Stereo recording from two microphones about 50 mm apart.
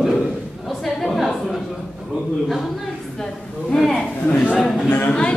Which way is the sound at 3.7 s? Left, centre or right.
Centre.